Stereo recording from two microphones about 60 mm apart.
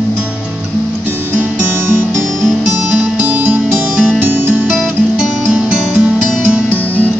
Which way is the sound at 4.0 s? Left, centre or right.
Right.